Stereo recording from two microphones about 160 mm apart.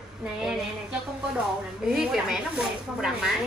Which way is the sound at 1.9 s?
5° right (ahead or behind).